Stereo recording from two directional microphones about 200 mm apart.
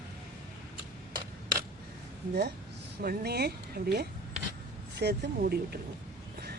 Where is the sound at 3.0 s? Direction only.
50° right (ahead or behind).